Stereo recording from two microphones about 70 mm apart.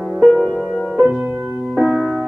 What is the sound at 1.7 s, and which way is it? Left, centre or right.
Music, centre.